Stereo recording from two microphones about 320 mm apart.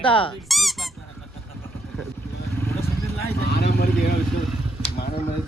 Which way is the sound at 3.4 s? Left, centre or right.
Left.